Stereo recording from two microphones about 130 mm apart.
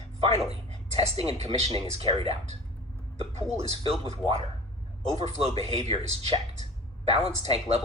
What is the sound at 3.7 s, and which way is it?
Speech, 50° right (ahead or behind).